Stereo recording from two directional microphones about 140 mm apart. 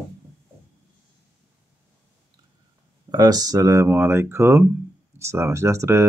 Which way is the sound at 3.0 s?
25° right (ahead or behind).